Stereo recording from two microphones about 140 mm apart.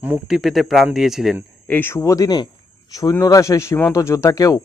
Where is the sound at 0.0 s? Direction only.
5° right (ahead or behind).